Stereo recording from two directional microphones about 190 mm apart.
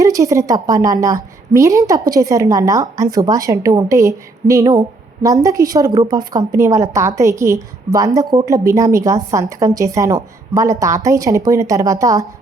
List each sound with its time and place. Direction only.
0.0 s a woman's voice: 15° right (ahead or behind)